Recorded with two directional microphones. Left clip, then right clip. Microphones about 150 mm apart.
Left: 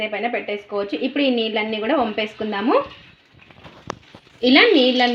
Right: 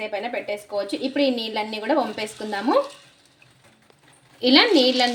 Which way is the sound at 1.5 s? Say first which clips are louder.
Left 3 dB; 35° left (ahead or behind).